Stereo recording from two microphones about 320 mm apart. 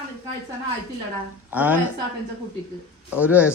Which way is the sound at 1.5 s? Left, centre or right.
Centre.